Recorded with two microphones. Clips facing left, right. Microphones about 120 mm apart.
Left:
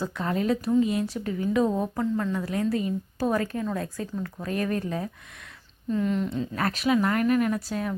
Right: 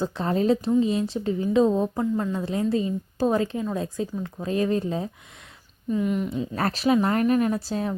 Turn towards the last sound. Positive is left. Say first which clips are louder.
# right 2 dB
turn(degrees=-30)  # may be behind; listen again after turning